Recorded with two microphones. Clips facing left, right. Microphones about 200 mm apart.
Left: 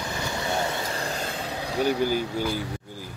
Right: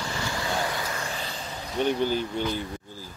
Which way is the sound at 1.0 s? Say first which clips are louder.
Left 4 dB; 45° left (ahead or behind).